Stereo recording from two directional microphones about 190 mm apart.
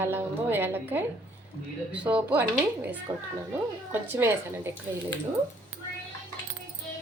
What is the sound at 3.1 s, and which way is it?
A child's voice, 20° right (ahead or behind).